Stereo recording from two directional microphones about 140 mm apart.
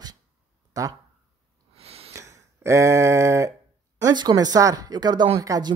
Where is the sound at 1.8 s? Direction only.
45° right (ahead or behind).